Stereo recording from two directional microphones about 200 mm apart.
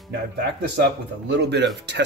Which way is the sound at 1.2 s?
60° right (ahead or behind).